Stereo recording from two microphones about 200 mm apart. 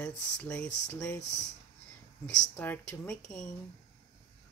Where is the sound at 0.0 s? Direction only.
5° left (ahead or behind).